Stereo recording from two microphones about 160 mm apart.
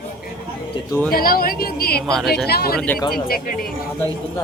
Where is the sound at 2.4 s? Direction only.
75° left (ahead or behind).